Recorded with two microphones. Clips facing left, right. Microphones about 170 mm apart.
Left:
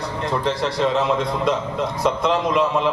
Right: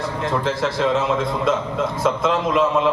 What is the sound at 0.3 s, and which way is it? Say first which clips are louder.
A man's voice: even; centre (ahead or behind).